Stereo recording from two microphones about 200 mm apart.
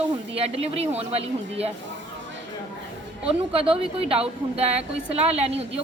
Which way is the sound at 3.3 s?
30° right (ahead or behind).